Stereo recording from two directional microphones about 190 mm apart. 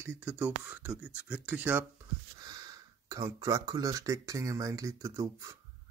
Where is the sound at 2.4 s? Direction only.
20° right (ahead or behind).